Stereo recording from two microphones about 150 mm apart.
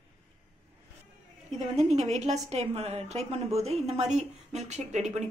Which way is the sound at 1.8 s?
50° right (ahead or behind).